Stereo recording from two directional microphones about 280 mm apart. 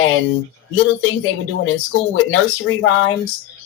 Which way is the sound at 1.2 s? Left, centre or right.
Left.